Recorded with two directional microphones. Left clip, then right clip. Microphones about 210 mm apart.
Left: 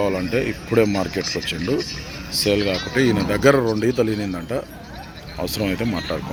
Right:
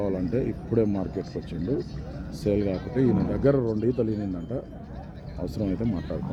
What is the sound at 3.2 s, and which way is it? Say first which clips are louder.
Speech: left 8 dB; 15° left (ahead or behind).